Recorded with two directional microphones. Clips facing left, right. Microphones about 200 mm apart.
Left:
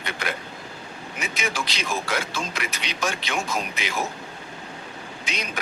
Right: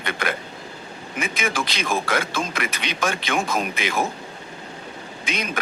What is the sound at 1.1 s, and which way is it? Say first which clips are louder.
A man's voice: right 4 dB; 55° right (ahead or behind).